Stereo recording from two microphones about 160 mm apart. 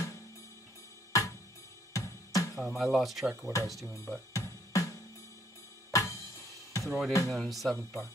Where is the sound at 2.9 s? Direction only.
Centre (ahead or behind).